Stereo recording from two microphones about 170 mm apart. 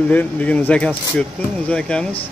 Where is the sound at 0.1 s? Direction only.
10° left (ahead or behind).